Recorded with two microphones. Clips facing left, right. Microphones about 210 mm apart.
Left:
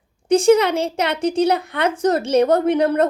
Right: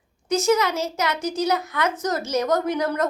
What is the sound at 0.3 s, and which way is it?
A woman's voice, 30° left (ahead or behind).